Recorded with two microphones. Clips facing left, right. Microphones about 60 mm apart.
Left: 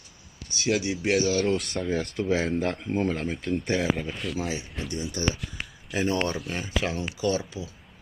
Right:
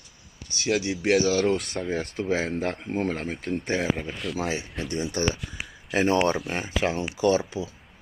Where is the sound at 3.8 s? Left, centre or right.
Right.